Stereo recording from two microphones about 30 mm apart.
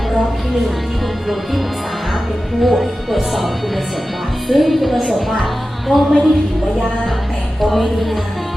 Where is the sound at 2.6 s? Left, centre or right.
Centre.